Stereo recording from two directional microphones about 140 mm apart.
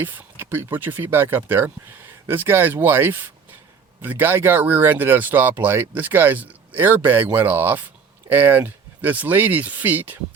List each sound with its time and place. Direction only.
0.0 s speech: 15° right (ahead or behind)